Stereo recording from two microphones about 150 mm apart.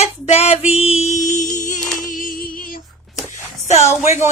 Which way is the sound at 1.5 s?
60° left (ahead or behind).